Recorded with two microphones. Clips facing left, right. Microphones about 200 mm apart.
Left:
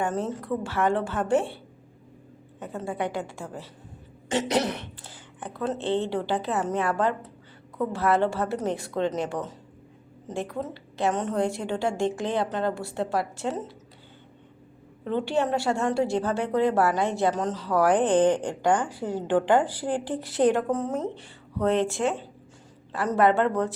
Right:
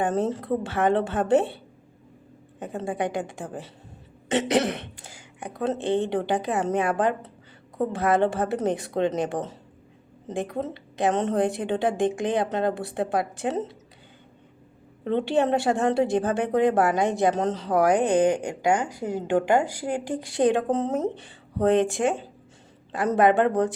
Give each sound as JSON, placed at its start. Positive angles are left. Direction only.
{"t": 0.3, "sound": "a woman's voice", "side_deg": -25}
{"t": 2.6, "sound": "a woman's voice", "side_deg": -15}
{"t": 4.9, "sound": "a woman's voice", "side_deg": -10}
{"t": 10.5, "sound": "a woman's voice", "side_deg": -20}
{"t": 15.1, "sound": "a woman's voice", "side_deg": -20}